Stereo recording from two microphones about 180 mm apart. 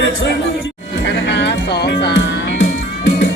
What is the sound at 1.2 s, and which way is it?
Music, 75° left (ahead or behind).